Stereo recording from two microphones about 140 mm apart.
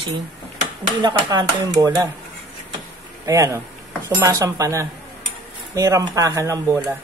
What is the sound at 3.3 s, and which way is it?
Speech, 25° right (ahead or behind).